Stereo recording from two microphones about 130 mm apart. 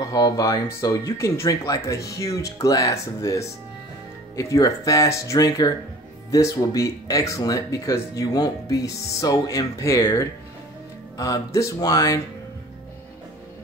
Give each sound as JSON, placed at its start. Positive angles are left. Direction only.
{"t": 0.0, "sound": "speech", "side_deg": 25}